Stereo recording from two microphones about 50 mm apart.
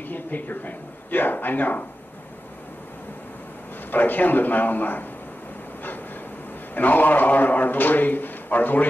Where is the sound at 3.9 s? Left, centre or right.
Left.